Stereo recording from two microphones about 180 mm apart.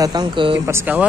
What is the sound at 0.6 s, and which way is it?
Speech, 10° right (ahead or behind).